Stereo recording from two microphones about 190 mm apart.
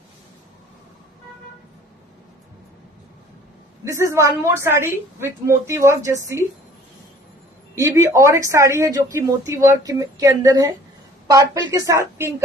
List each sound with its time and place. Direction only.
3.8 s speech: 15° right (ahead or behind)
7.8 s speech: 15° right (ahead or behind)